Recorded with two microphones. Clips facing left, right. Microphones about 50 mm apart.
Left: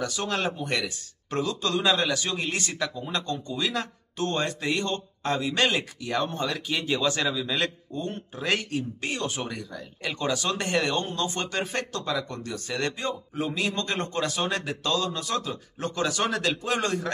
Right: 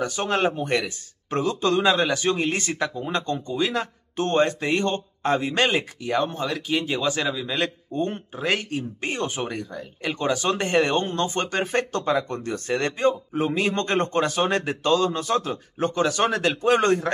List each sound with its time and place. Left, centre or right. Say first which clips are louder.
0.0 s speech: right 5 dB; right
1.9 s speech: right 2 dB; centre
2.1 s speech: right 6 dB; right
3.5 s speech: right 5 dB; centre
4.2 s speech: right 6 dB; right
5.9 s speech: right 4 dB; centre
7.9 s speech: right 6 dB; right
8.4 s speech: right 2 dB; centre
8.7 s speech: right 2 dB; right
9.7 s speech: right 4 dB; centre
10.1 s speech: right 4 dB; right